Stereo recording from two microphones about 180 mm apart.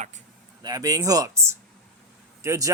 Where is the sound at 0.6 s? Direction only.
20° right (ahead or behind).